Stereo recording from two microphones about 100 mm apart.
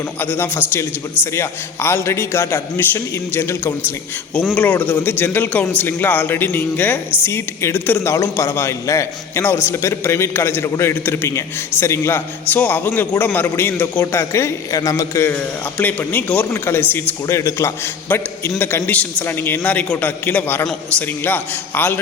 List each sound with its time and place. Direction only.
0.2 s a man's voice: 20° left (ahead or behind)
15.3 s a man's voice: 15° left (ahead or behind)
16.5 s a man's voice: 25° left (ahead or behind)